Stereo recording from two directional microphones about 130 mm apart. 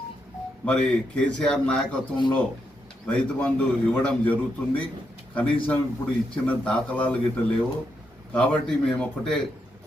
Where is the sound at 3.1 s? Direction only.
10° left (ahead or behind).